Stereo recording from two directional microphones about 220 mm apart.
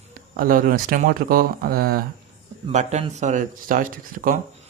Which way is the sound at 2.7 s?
30° right (ahead or behind).